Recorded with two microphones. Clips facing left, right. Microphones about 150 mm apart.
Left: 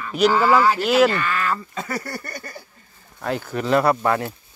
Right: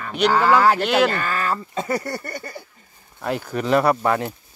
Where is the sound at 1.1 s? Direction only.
40° right (ahead or behind); by 2.6 s 25° right (ahead or behind).